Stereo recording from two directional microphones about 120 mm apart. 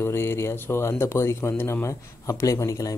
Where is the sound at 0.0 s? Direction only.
20° left (ahead or behind).